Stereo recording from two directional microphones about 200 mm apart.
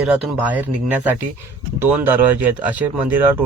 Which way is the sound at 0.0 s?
5° right (ahead or behind).